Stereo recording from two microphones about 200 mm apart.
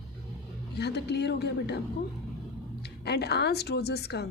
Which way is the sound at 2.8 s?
55° left (ahead or behind).